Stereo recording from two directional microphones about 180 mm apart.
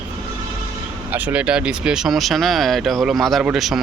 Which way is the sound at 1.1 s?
10° right (ahead or behind).